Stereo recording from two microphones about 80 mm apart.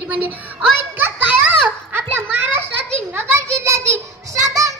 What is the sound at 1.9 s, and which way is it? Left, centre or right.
Children playing, right.